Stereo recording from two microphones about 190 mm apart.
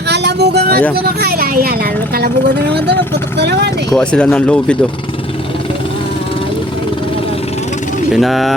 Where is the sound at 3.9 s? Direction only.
5° left (ahead or behind).